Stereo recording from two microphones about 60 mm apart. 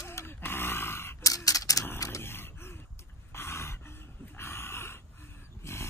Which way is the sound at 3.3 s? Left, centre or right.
Left.